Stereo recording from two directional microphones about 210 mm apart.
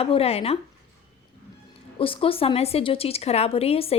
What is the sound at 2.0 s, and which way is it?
A woman's voice, 25° left (ahead or behind).